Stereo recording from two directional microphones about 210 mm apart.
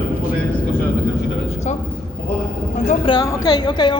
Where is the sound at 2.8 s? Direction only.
25° left (ahead or behind).